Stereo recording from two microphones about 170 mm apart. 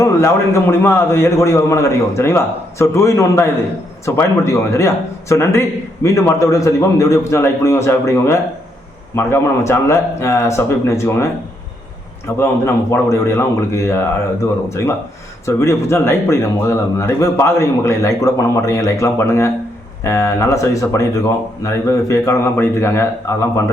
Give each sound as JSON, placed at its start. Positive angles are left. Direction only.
{"t": 0.0, "sound": "a man's voice", "side_deg": 15}
{"t": 12.4, "sound": "a man's voice", "side_deg": 15}
{"t": 15.4, "sound": "a man's voice", "side_deg": 15}